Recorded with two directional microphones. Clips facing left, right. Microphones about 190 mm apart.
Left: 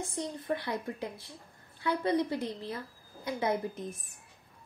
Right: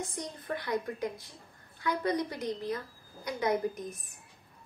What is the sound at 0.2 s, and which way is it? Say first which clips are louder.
Speech: left 3 dB; 30° left (ahead or behind).